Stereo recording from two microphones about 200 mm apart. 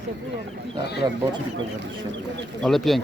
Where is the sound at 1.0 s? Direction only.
20° right (ahead or behind).